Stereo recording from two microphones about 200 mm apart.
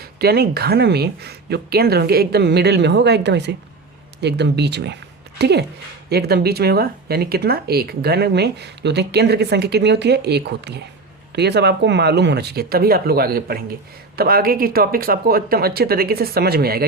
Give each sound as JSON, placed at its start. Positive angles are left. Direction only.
{"t": 0.0, "sound": "speech", "side_deg": -50}